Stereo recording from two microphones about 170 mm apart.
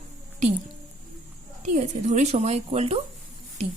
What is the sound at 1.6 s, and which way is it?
A woman's voice, 45° right (ahead or behind).